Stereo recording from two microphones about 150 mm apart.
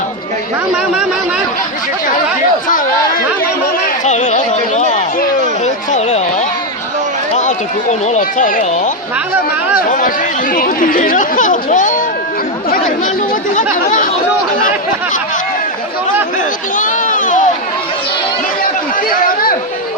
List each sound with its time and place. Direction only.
2.6 s chatter: 60° left (ahead or behind)
4.0 s a sound: 50° left (ahead or behind)
7.3 s speech: 50° left (ahead or behind)
10.5 s speech: 65° left (ahead or behind)
16.7 s a sound: 60° left (ahead or behind)
19.1 s chatter: 70° left (ahead or behind)